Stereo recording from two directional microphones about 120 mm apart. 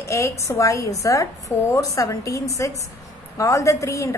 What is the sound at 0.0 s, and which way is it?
A woman's voice, 25° left (ahead or behind).